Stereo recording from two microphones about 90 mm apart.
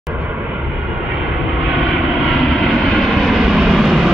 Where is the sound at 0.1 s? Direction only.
15° right (ahead or behind).